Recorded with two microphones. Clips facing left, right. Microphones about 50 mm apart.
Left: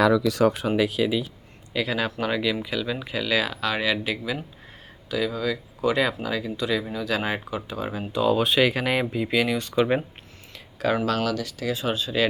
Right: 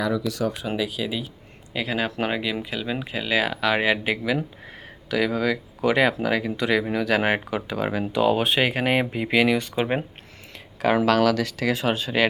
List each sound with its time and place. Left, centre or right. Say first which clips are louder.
0.0 s speech: left 5 dB; left
1.0 s speech: left 5 dB; centre
1.7 s speech: even; centre
3.4 s speech: right 4 dB; right
5.0 s speech: right 3 dB; right
8.5 s speech: even; right
9.1 s speech: right 3 dB; right
10.8 s speech: right 3 dB; right
11.0 s speech: right 6 dB; right